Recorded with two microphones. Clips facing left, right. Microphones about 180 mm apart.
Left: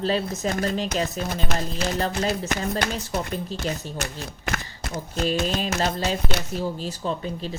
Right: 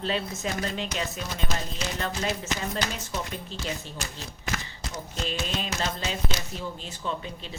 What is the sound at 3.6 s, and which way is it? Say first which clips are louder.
Speech: left 5 dB; 55° left (ahead or behind).